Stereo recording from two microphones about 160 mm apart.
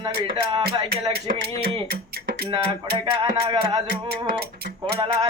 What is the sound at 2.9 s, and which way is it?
Speech, 30° right (ahead or behind).